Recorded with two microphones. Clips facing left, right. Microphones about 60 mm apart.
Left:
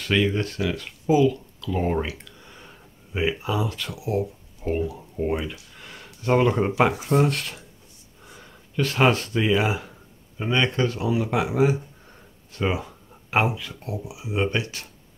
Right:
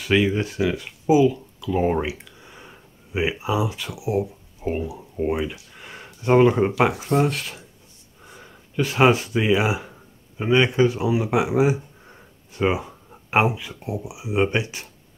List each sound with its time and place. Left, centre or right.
0.0 s speech: centre